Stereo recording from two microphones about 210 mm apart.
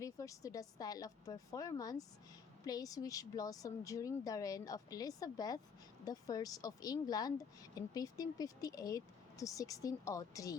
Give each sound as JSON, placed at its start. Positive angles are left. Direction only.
{"t": 0.0, "sound": "speech", "side_deg": 15}